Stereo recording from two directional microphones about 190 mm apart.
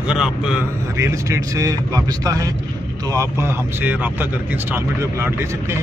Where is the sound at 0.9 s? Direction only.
15° right (ahead or behind).